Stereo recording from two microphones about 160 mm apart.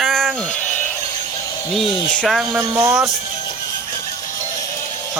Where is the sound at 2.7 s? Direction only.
15° right (ahead or behind).